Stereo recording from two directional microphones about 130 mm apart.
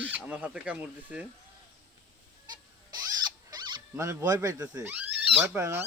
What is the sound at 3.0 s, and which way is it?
Rodents, 30° right (ahead or behind).